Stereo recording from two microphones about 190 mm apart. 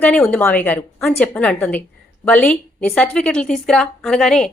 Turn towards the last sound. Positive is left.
turn(degrees=5)  # may be behind; listen again after turning